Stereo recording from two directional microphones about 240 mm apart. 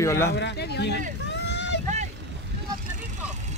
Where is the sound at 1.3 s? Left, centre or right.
Left.